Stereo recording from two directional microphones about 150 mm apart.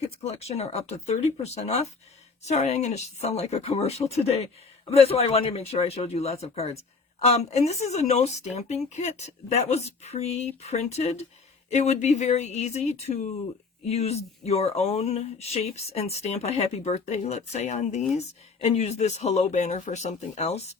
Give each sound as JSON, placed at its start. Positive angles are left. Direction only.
{"t": 0.2, "sound": "speech", "side_deg": 45}